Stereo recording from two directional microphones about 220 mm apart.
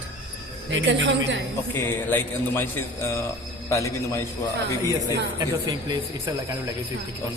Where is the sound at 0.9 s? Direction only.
55° right (ahead or behind).